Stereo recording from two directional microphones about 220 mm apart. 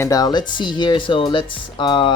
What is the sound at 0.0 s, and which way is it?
Speech, 15° left (ahead or behind).